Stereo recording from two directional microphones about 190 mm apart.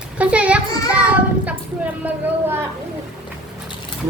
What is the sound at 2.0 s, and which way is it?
Speech, 10° right (ahead or behind).